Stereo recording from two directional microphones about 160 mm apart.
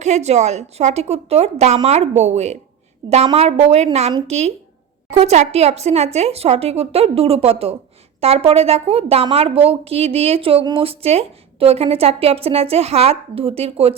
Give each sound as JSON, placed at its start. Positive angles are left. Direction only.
{"t": 0.0, "sound": "a woman's voice", "side_deg": -45}